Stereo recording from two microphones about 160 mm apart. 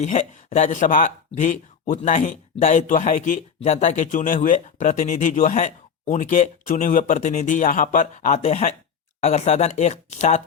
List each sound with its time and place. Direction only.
0.0 s speech: 45° left (ahead or behind)